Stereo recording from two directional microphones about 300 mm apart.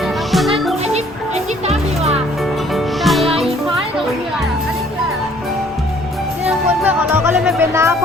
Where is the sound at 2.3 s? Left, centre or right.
Centre.